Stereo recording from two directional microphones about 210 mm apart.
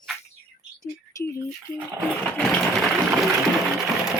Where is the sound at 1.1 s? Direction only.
15° left (ahead or behind).